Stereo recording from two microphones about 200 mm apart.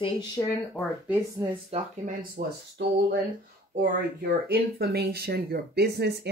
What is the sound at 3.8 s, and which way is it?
Speech, 45° right (ahead or behind).